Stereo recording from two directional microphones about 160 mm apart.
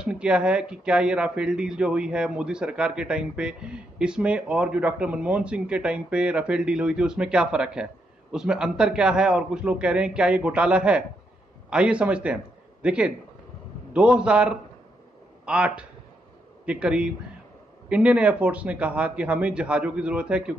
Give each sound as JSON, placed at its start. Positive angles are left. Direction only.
{"t": 0.0, "sound": "a man's voice", "side_deg": -5}